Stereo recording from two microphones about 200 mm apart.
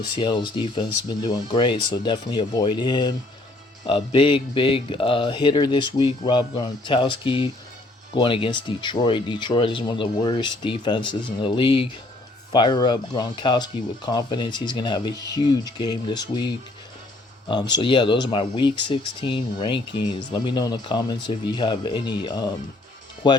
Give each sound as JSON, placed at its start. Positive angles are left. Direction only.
{"t": 0.0, "sound": "speech", "side_deg": 20}
{"t": 17.7, "sound": "speech", "side_deg": 25}